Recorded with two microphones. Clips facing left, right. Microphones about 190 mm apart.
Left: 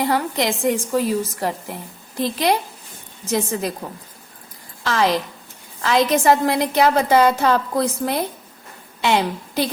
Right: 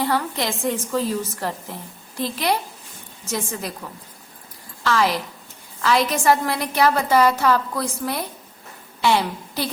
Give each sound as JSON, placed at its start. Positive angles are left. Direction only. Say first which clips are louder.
{"t": 0.0, "sound": "a woman's voice", "louder": "left 3 dB", "side_deg": 15}